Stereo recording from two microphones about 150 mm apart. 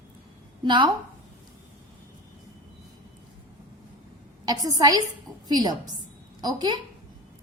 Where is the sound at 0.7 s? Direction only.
35° right (ahead or behind).